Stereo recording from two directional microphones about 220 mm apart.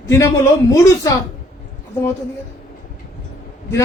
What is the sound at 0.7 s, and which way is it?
Speech, 15° left (ahead or behind).